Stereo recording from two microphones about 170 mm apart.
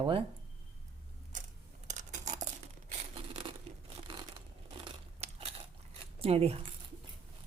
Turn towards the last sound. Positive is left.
turn(degrees=-35)  # may be behind; listen again after turning